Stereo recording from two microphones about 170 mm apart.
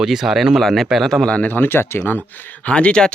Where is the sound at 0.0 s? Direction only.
Centre (ahead or behind).